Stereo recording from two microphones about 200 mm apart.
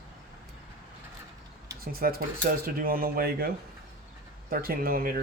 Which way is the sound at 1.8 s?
50° right (ahead or behind).